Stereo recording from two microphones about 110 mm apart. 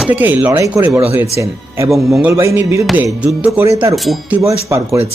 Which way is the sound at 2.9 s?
10° right (ahead or behind).